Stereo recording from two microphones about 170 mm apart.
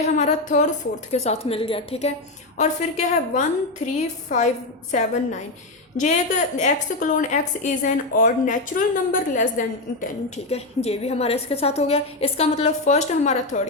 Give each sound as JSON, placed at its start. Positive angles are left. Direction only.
{"t": 0.0, "sound": "a woman's voice", "side_deg": 40}